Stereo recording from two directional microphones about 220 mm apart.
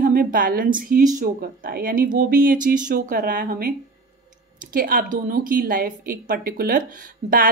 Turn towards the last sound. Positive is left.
turn(degrees=-40)  # may be behind; listen again after turning